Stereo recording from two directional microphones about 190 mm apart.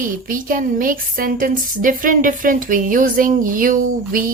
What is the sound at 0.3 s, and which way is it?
Speech, 45° right (ahead or behind).